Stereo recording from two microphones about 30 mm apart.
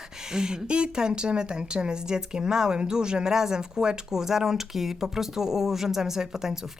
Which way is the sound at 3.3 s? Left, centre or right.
Centre.